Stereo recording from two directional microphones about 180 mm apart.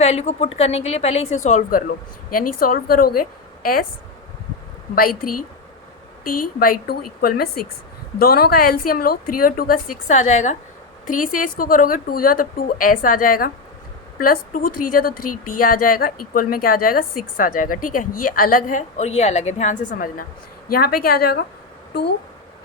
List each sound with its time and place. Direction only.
0.0 s a woman's voice: 35° left (ahead or behind); by 3.8 s 55° left (ahead or behind)
4.9 s a woman's voice: 50° left (ahead or behind)